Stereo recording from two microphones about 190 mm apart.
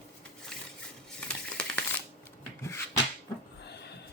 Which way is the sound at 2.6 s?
15° left (ahead or behind).